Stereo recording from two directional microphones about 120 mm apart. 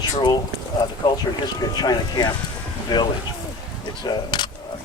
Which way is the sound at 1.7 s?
35° left (ahead or behind).